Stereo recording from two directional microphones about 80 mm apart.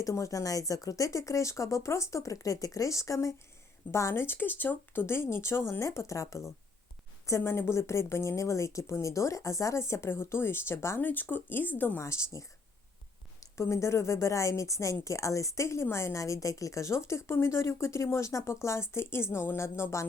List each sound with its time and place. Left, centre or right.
0.0 s a woman's voice: left
11.9 s a woman's voice: left